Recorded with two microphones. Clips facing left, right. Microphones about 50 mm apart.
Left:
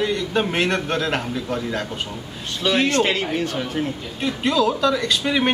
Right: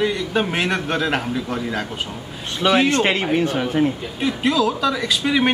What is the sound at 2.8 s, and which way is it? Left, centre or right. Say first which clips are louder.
Speech: right 2 dB; right.